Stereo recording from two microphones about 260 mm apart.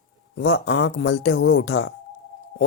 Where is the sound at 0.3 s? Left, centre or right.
Left.